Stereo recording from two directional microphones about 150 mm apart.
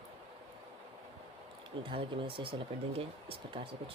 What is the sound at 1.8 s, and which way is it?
Speech, 35° right (ahead or behind).